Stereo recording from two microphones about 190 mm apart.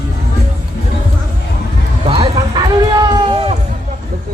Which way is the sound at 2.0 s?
30° right (ahead or behind).